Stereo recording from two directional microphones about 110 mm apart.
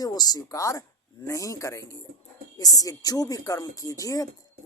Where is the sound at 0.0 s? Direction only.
35° left (ahead or behind).